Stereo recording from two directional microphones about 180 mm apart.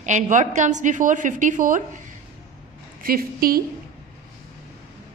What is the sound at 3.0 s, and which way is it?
Speech, 55° right (ahead or behind).